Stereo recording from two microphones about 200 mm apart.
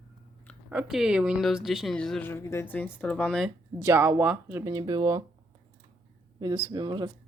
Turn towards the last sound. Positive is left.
turn(degrees=-20)  # may be behind; listen again after turning